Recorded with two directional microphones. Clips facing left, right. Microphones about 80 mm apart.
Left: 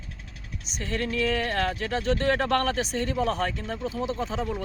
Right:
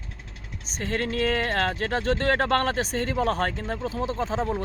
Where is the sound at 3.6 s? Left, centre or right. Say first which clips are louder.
Right 1 dB; right.